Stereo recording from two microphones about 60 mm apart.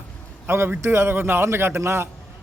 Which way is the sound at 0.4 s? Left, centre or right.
Right.